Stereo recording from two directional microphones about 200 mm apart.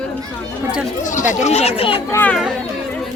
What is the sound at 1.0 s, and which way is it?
Speech, 40° left (ahead or behind).